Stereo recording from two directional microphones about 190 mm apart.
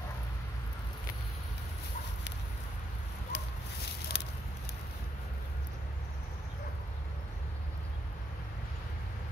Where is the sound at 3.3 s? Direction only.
65° left (ahead or behind).